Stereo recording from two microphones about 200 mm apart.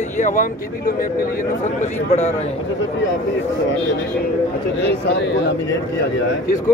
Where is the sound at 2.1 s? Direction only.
35° left (ahead or behind).